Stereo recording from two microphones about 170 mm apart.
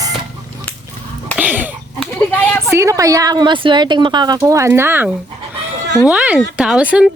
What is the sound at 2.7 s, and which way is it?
A woman's voice, 20° right (ahead or behind).